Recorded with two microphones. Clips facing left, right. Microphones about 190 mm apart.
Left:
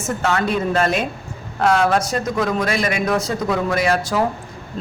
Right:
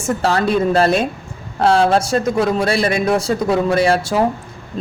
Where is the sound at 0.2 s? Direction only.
35° right (ahead or behind).